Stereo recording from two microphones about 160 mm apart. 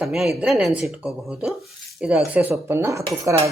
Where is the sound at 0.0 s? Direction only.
5° right (ahead or behind).